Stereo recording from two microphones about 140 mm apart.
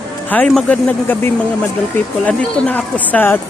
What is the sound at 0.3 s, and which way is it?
Speech, 10° left (ahead or behind).